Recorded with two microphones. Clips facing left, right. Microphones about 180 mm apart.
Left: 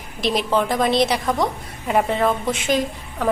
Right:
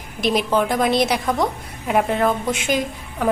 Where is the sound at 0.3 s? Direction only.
5° right (ahead or behind).